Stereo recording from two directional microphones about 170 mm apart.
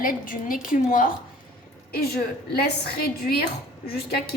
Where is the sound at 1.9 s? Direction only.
65° left (ahead or behind).